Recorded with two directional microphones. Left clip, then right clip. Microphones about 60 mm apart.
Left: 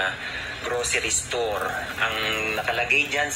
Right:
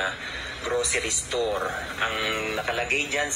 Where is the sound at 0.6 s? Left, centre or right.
Left.